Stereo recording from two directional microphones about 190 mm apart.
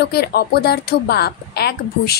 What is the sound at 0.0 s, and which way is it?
A woman's voice, 55° left (ahead or behind).